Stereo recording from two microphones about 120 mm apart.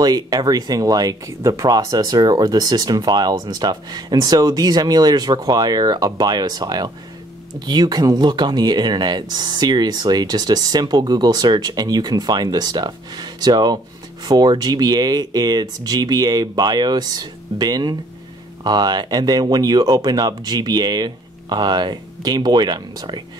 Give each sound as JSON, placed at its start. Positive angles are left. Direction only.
{"t": 0.0, "sound": "speech", "side_deg": -30}